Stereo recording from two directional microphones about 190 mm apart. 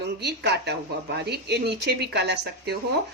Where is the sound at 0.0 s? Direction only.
60° right (ahead or behind).